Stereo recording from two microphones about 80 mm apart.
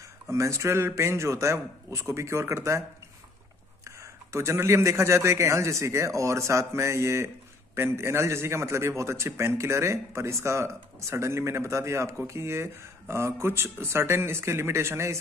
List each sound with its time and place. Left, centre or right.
0.3 s a man's voice: right
3.8 s a man's voice: right